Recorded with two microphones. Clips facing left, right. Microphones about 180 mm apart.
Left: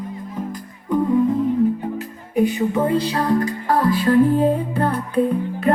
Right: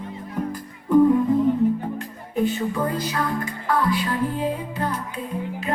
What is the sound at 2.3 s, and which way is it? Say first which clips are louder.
Music: left 5 dB; 20° left (ahead or behind).